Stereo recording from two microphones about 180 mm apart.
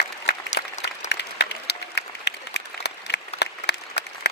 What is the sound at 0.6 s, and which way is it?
Applause, 70° left (ahead or behind).